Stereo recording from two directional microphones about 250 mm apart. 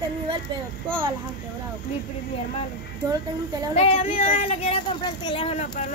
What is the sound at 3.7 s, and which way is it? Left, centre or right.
Speech, left.